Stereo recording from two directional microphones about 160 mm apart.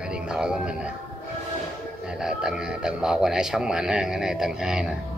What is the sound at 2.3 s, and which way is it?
Speech, 5° right (ahead or behind).